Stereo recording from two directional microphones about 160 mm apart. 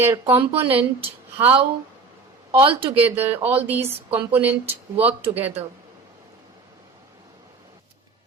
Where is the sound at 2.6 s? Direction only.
35° right (ahead or behind).